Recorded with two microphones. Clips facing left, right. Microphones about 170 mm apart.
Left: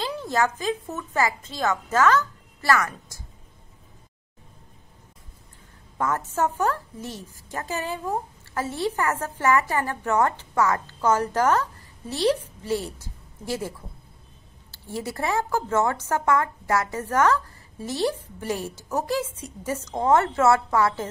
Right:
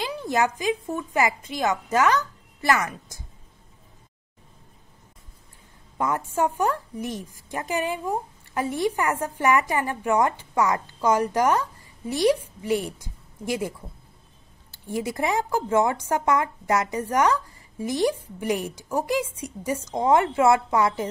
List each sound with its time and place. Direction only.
0.0 s a woman's voice: 15° right (ahead or behind)
5.9 s a woman's voice: 15° right (ahead or behind)